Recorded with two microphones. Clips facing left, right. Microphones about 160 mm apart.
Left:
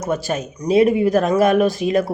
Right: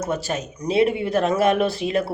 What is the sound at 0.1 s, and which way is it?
A man's voice, 40° left (ahead or behind).